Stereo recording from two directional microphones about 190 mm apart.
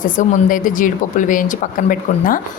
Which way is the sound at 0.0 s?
45° left (ahead or behind).